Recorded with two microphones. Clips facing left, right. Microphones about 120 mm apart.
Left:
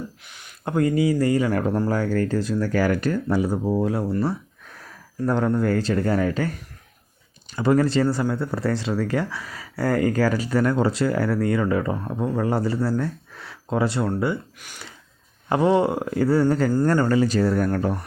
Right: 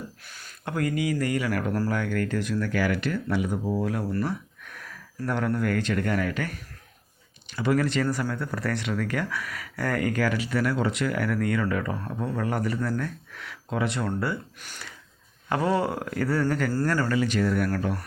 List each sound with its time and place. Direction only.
0.3 s a sound: 20° left (ahead or behind)
0.6 s speech: 25° left (ahead or behind)
3.7 s speech: 20° left (ahead or behind)
7.5 s speech: 35° left (ahead or behind)
14.0 s speech: 20° left (ahead or behind)
15.4 s speech: 25° left (ahead or behind)